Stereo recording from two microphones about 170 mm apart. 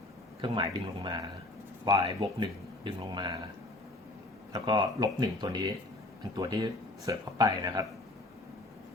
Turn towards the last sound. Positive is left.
turn(degrees=-20)  # may be behind; listen again after turning